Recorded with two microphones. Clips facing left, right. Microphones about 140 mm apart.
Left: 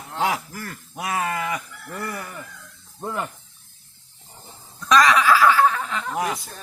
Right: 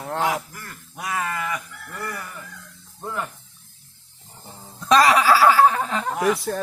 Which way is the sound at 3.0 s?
20° left (ahead or behind).